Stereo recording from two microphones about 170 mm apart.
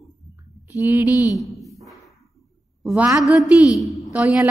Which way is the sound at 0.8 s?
15° right (ahead or behind).